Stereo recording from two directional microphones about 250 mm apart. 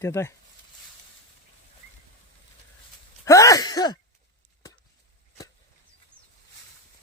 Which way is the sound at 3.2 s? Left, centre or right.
Centre.